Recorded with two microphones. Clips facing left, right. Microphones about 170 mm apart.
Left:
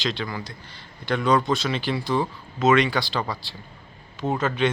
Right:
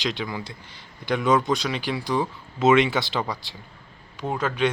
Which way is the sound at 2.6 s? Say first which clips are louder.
Right 1 dB; 20° right (ahead or behind).